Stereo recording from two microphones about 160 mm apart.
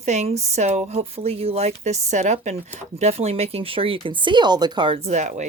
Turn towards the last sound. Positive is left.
turn(degrees=-50)  # may be behind; listen again after turning